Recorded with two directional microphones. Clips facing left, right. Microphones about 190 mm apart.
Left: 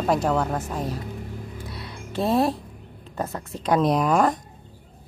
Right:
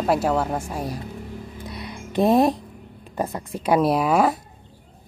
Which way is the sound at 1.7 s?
15° right (ahead or behind).